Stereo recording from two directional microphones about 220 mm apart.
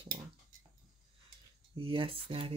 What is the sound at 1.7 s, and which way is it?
Speech, 25° right (ahead or behind).